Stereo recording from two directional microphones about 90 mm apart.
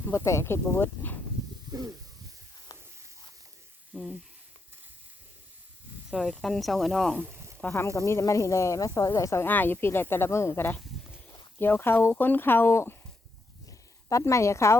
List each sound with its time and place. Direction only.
0.0 s speech: 30° left (ahead or behind)
2.7 s a sound: 45° left (ahead or behind)
3.9 s speech: 5° right (ahead or behind)
6.1 s speech: 5° right (ahead or behind)
7.7 s speech: 35° left (ahead or behind)
9.5 s speech: 20° left (ahead or behind)
13.7 s a sound: 35° left (ahead or behind)